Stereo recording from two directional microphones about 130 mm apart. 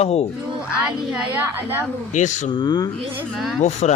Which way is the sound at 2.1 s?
70° left (ahead or behind).